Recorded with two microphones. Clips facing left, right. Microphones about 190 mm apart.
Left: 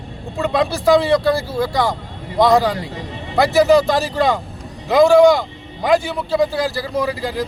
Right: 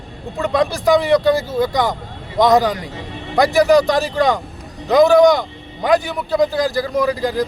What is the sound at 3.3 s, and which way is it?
A man's voice, centre (ahead or behind).